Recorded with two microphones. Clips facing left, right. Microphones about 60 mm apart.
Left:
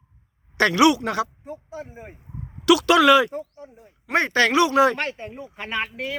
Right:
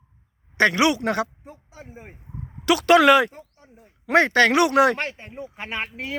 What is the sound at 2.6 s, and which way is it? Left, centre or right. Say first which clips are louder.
Speech: even; right.